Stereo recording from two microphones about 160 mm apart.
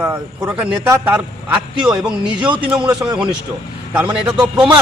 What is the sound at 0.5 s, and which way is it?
A man's voice, 5° right (ahead or behind).